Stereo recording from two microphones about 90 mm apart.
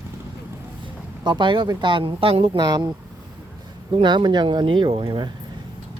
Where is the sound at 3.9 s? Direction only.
60° right (ahead or behind).